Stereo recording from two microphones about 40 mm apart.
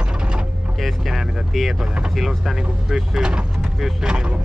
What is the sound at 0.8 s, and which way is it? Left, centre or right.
Speech, centre.